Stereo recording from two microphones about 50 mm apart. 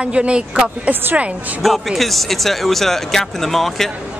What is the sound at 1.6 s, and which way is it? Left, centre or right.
Speech, centre.